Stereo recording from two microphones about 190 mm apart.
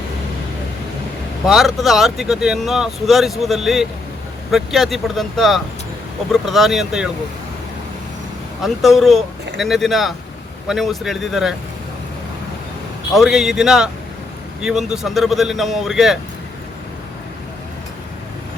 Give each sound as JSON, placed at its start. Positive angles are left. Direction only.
{"t": 1.5, "sound": "speech", "side_deg": 0}
{"t": 8.6, "sound": "speech", "side_deg": 0}
{"t": 13.1, "sound": "speech", "side_deg": 0}